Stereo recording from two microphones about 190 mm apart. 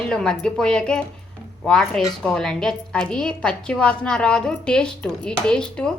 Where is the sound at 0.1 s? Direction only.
5° left (ahead or behind).